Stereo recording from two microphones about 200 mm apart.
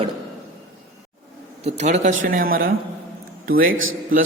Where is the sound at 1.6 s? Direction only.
35° right (ahead or behind).